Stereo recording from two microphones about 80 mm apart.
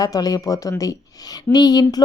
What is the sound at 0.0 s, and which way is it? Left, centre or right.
Speech, left.